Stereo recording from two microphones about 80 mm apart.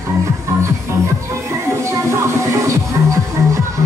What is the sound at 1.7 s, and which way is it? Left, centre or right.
Music, right.